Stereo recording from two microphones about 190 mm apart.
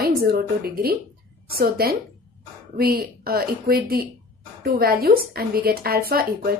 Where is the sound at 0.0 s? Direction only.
55° right (ahead or behind).